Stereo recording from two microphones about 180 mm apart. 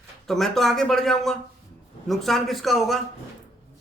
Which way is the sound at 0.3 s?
Centre (ahead or behind).